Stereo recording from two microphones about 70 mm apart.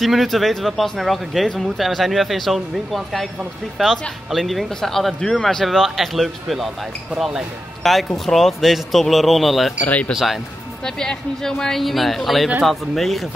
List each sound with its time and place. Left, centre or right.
0.0 s speech: centre
9.8 s speech: left
10.1 s speech: centre
10.8 s speech: centre